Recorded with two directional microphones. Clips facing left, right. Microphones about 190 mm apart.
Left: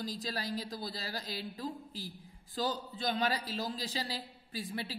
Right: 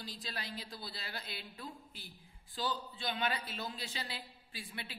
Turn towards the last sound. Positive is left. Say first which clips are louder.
# left 8 dB
turn(degrees=40)  # may be behind; listen again after turning